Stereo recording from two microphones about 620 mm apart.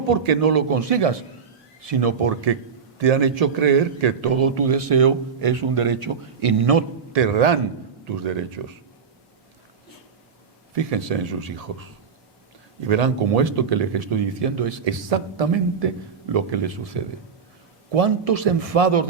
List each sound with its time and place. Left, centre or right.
0.1 s a man's voice: right
10.8 s a man's voice: right
12.8 s a man's voice: right